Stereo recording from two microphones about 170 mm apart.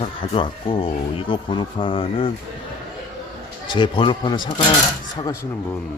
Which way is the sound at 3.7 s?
30° left (ahead or behind).